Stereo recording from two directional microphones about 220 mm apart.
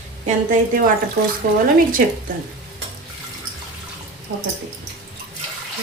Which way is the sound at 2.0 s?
40° right (ahead or behind).